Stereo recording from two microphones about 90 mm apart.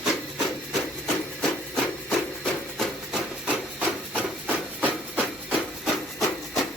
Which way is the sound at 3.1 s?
15° right (ahead or behind).